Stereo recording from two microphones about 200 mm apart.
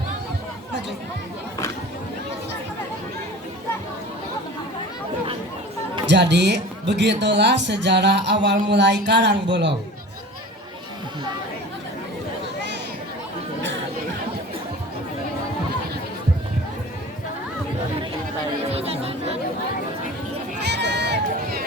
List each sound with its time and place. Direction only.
6.1 s speech: 60° right (ahead or behind)
18.7 s chatter: 30° right (ahead or behind)
20.7 s run: 60° right (ahead or behind)